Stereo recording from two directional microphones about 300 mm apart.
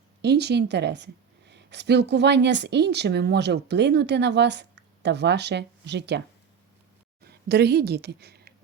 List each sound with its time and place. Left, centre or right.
0.2 s speech: right